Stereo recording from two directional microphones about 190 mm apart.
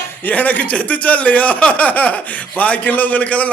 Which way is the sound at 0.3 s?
10° left (ahead or behind).